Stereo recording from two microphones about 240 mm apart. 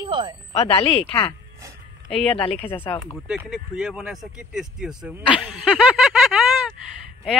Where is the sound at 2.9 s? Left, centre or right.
Left.